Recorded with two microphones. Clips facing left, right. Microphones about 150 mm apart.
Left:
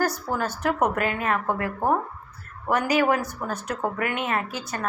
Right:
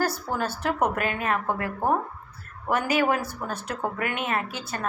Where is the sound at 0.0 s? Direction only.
30° right (ahead or behind).